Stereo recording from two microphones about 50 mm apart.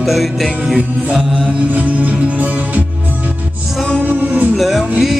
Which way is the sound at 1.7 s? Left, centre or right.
Right.